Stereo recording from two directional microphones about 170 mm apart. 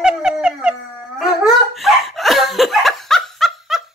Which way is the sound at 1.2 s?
Centre (ahead or behind).